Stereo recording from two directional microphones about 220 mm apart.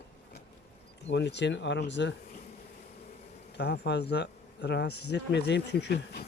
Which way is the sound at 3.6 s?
50° left (ahead or behind).